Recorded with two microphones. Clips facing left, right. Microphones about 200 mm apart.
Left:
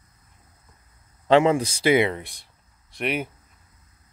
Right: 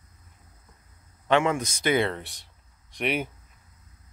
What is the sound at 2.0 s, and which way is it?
Speech, 10° left (ahead or behind).